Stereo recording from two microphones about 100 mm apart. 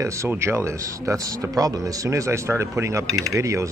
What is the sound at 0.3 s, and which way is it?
Speech, 20° right (ahead or behind).